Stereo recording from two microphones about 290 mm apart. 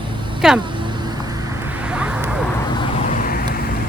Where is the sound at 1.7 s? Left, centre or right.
Centre.